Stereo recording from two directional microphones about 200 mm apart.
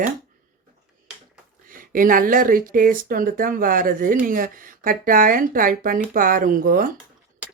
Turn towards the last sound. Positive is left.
turn(degrees=-45)  # may be behind; listen again after turning